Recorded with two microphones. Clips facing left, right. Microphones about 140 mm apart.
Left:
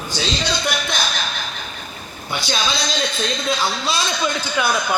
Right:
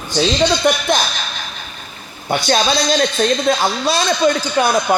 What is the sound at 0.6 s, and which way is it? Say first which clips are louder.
Speech: right 8 dB; 50° right (ahead or behind).